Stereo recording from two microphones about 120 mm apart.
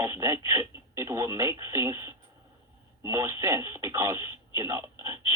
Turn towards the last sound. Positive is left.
turn(degrees=-30)  # may be behind; listen again after turning